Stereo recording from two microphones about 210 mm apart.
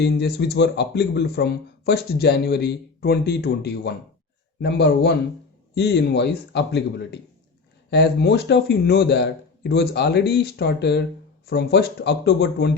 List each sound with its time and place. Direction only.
0.0 s speech: 50° left (ahead or behind)